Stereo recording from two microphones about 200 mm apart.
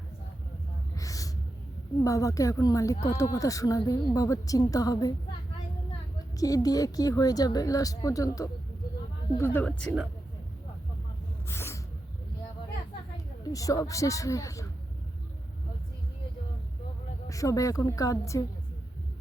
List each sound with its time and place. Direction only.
0.9 s gasp: 15° left (ahead or behind)
2.0 s a woman's voice: 15° left (ahead or behind)
6.3 s a woman's voice: 15° left (ahead or behind)
11.4 s a sound: 10° left (ahead or behind)
13.4 s a woman's voice: 15° left (ahead or behind)
17.2 s a woman's voice: 15° left (ahead or behind)